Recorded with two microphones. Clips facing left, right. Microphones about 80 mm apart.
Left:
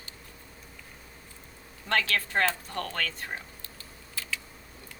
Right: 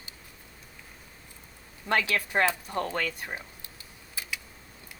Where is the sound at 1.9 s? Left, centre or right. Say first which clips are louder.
Right 1 dB; centre.